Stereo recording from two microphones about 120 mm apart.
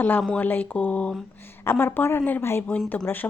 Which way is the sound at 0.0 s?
10° left (ahead or behind).